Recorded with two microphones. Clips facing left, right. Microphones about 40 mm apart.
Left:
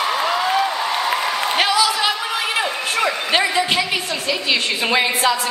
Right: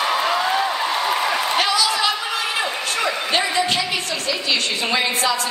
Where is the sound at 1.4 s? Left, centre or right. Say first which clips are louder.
Left 2 dB; centre.